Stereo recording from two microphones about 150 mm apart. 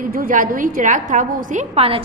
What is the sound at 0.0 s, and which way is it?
A woman's voice, 70° right (ahead or behind).